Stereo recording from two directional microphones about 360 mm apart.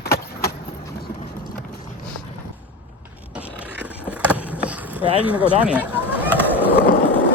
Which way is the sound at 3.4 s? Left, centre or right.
Centre.